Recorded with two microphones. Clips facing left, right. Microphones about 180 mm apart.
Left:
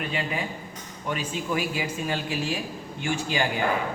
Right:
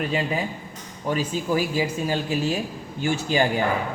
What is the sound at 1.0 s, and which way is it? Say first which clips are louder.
A woman's voice: right 5 dB; 35° right (ahead or behind).